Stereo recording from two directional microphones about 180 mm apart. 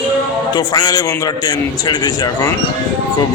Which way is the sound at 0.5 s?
20° left (ahead or behind).